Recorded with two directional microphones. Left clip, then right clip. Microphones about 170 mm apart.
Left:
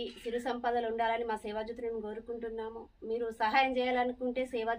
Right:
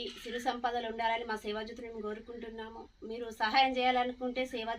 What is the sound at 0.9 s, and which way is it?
Speech, 45° left (ahead or behind).